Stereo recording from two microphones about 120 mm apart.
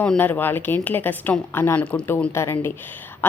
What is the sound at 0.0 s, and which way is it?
Speech, 10° left (ahead or behind).